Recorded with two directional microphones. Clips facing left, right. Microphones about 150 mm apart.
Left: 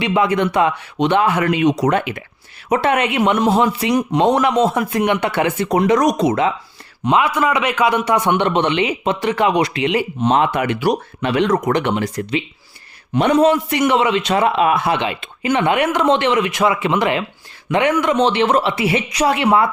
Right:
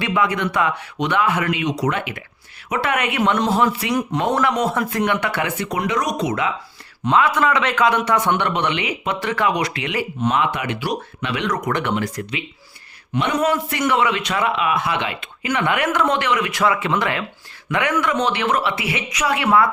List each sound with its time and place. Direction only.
0.0 s a man's voice: 25° left (ahead or behind); by 2.0 s 45° left (ahead or behind)
2.6 s a man's voice: 30° left (ahead or behind)
5.6 s speech: 35° left (ahead or behind)
6.2 s speech: 30° left (ahead or behind)
7.0 s a man's voice: 15° left (ahead or behind)
10.3 s speech: 40° left (ahead or behind); by 12.4 s 25° left (ahead or behind)
13.4 s a man's voice: 20° left (ahead or behind); by 14.9 s 35° left (ahead or behind)
15.0 s a man's voice: 25° left (ahead or behind)